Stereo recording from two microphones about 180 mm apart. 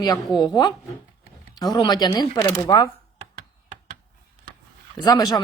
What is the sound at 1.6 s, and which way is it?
A woman's voice, 25° left (ahead or behind).